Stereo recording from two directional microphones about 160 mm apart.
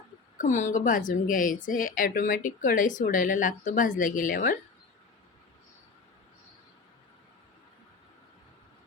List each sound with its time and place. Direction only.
0.3 s a woman's voice: 50° left (ahead or behind)